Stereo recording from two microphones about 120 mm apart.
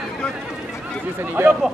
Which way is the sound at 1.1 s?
15° right (ahead or behind).